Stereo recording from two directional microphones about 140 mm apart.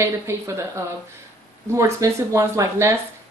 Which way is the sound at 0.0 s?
20° right (ahead or behind).